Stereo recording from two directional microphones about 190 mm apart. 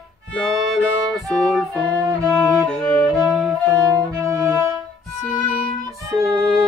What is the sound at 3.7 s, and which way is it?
Music, 15° right (ahead or behind).